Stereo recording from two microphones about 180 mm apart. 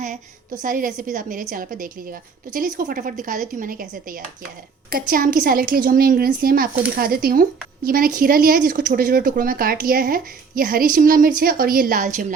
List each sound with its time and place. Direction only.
0.6 s speech: 50° right (ahead or behind)